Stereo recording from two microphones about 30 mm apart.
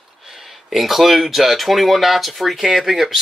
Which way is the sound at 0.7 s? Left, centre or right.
Centre.